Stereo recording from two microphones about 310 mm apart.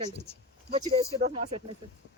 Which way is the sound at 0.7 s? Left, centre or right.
Centre.